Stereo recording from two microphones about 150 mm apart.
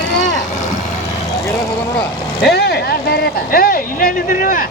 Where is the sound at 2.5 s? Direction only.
90° left.